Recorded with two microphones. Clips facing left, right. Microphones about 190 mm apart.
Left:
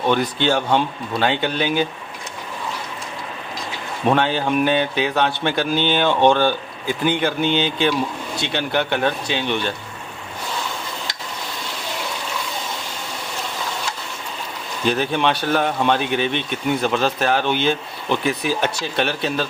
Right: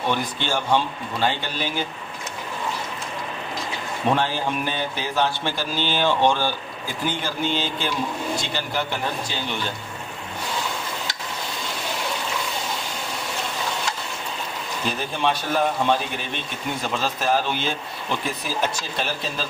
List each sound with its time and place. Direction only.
0.1 s speech: 65° left (ahead or behind)
4.1 s a man's voice: 65° left (ahead or behind)
14.9 s a man's voice: 70° left (ahead or behind)